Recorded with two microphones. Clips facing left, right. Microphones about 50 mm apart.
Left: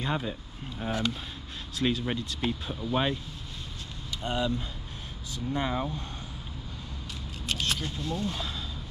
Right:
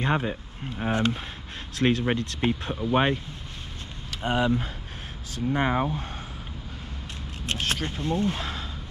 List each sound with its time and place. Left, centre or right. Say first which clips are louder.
0.0 s speech: right 5 dB; right
1.8 s speech: right 5 dB; right
2.7 s speech: right 5 dB; right
4.2 s speech: right 6 dB; right
7.4 s speech: right 3 dB; right